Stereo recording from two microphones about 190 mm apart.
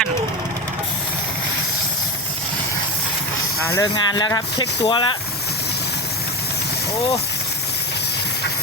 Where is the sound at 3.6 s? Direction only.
20° left (ahead or behind).